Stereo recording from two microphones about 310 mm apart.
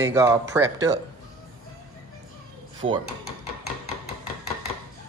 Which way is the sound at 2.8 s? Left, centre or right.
Centre.